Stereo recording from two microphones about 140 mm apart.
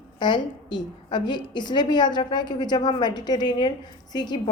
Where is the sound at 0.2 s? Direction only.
35° left (ahead or behind).